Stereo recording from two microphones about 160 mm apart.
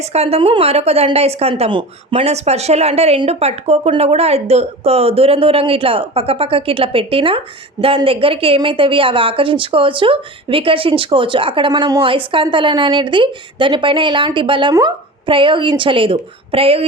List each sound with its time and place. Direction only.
0.0 s a woman's voice: 40° right (ahead or behind)